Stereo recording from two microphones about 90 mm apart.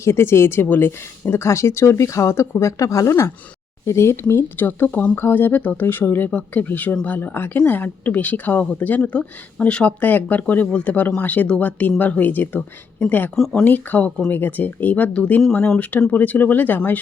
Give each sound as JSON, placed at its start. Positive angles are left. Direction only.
{"t": 0.0, "sound": "speech", "side_deg": 30}
{"t": 13.3, "sound": "speech", "side_deg": 5}
{"t": 13.7, "sound": "speech", "side_deg": 20}